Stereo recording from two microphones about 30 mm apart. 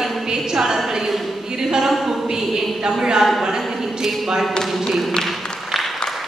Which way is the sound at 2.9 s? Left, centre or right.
Centre.